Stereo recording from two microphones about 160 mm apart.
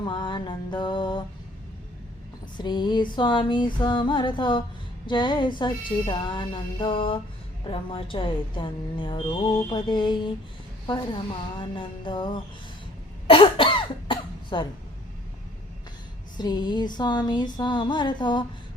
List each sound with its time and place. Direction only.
0.0 s music: 30° left (ahead or behind)
2.6 s music: 30° left (ahead or behind)
5.0 s speech: 30° left (ahead or behind)
9.6 s music: 30° left (ahead or behind)
10.8 s speech: 30° left (ahead or behind)
13.2 s cough: 35° left (ahead or behind)
16.4 s music: 25° left (ahead or behind)